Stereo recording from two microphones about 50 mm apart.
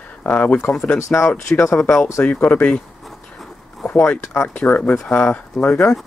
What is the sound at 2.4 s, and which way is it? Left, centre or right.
Speech, left.